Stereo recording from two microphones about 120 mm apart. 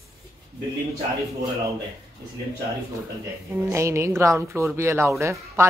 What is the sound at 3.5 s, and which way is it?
A woman's voice, 25° right (ahead or behind).